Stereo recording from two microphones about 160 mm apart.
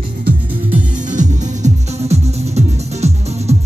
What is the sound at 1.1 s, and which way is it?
Music, 50° right (ahead or behind).